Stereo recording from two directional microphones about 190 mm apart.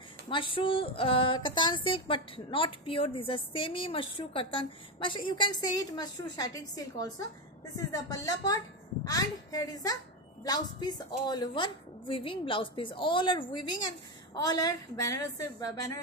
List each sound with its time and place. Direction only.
0.3 s a woman's voice: 25° left (ahead or behind)